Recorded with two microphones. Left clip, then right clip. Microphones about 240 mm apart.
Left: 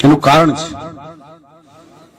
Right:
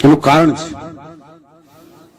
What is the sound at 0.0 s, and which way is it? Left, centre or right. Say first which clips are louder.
A man's voice: left 1 dB; left.